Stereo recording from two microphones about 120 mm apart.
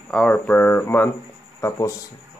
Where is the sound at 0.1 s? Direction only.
10° left (ahead or behind).